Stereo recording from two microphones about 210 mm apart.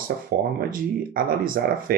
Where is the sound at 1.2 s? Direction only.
40° right (ahead or behind).